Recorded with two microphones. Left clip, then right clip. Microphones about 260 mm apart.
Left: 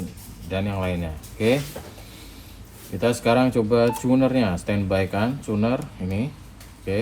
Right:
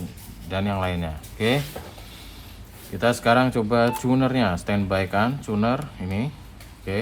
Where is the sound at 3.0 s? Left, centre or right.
Right.